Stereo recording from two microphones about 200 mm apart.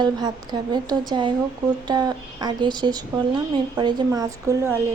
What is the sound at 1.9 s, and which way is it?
A woman's voice, 20° right (ahead or behind).